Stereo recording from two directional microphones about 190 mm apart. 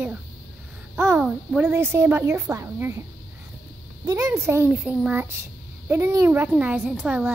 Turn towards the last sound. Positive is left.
turn(degrees=-5)  # may be behind; listen again after turning